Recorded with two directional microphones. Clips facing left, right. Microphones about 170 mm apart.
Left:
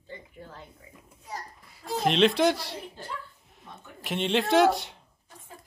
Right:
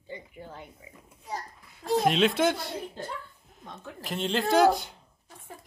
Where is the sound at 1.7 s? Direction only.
Centre (ahead or behind).